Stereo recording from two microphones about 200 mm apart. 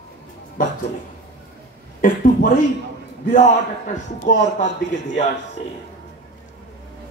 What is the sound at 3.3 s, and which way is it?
A man's voice, 40° left (ahead or behind).